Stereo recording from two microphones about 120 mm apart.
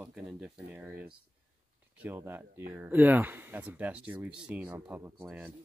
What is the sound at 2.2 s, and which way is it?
Speech, 15° right (ahead or behind).